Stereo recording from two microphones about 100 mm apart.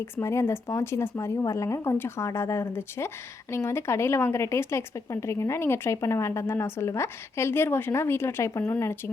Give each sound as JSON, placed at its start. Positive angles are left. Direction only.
{"t": 0.0, "sound": "a woman's voice", "side_deg": 25}